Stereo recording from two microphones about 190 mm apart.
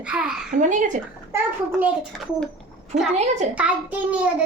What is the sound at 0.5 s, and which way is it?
Speech, 40° right (ahead or behind).